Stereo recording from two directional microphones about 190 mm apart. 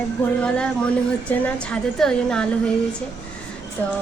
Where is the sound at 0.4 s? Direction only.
5° left (ahead or behind).